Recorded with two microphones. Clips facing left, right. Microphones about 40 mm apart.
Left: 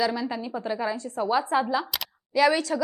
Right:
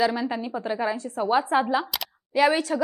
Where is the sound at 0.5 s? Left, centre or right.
Centre.